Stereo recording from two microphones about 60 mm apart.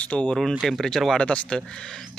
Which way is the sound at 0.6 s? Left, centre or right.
Centre.